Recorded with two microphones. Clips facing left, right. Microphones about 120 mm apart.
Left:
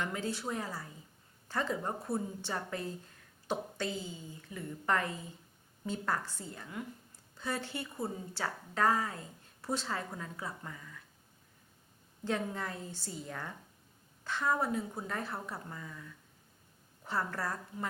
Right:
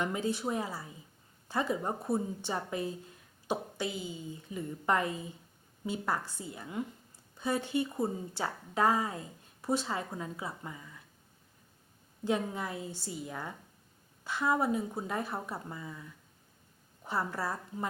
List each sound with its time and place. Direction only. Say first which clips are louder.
0.0 s a woman's voice: right 4 dB; 20° right (ahead or behind)
12.2 s a woman's voice: right 3 dB; 15° right (ahead or behind)